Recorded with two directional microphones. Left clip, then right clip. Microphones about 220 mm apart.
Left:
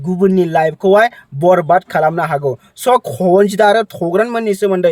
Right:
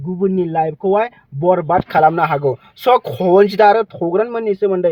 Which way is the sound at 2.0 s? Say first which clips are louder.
Right 1 dB; 10° left (ahead or behind).